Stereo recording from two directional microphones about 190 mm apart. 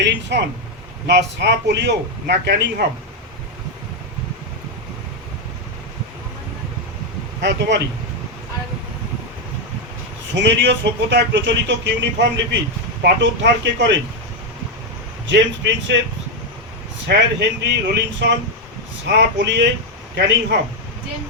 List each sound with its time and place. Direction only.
0.0 s speech: 65° right (ahead or behind)
7.4 s speech: 65° right (ahead or behind)
10.3 s speech: 65° right (ahead or behind)
15.3 s speech: 70° right (ahead or behind)
17.1 s speech: 65° right (ahead or behind)